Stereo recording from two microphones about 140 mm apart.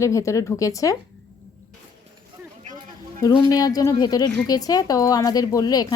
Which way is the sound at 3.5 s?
25° left (ahead or behind).